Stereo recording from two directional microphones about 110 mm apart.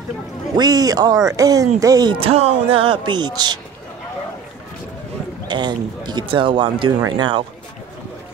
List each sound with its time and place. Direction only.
0.6 s speech: 35° right (ahead or behind)
2.1 s speech: 65° right (ahead or behind); by 3.5 s 40° right (ahead or behind)
5.5 s speech: 45° right (ahead or behind)